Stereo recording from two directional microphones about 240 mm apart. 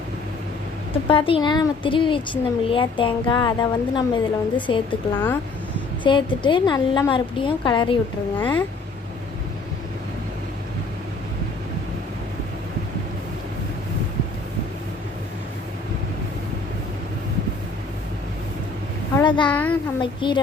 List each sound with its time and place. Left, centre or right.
1.0 s speech: left
5.1 s speech: centre
6.0 s speech: centre
19.1 s a sound: centre
19.5 s a child's voice: centre
20.0 s speech: centre